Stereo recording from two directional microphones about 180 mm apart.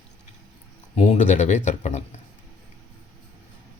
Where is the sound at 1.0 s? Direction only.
40° left (ahead or behind).